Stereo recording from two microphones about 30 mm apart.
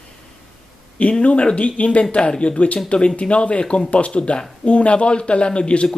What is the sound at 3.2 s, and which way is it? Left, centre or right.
Speech, left.